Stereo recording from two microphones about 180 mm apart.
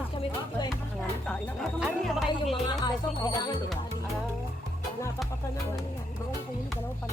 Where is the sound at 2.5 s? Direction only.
20° left (ahead or behind).